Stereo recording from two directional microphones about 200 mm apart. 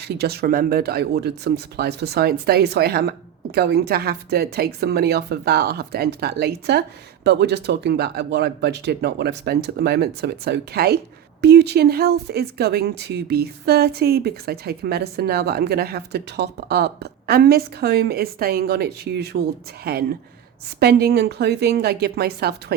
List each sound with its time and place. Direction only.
0.2 s speech: 50° right (ahead or behind)